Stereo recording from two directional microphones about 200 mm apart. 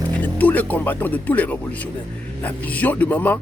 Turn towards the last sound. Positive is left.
turn(degrees=10)  # may be behind; listen again after turning